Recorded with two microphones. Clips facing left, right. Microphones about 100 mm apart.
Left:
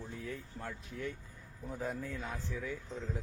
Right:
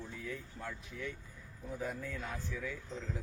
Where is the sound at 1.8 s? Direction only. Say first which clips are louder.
Left 2 dB; 30° left (ahead or behind).